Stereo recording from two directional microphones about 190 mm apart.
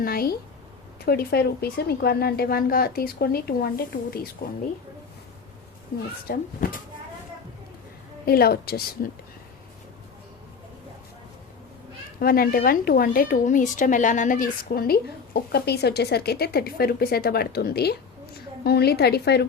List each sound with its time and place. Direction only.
0.0 s speech: 50° left (ahead or behind)
6.2 s speech: 45° left (ahead or behind)
8.2 s speech: 55° left (ahead or behind)
12.2 s a woman's voice: 50° left (ahead or behind)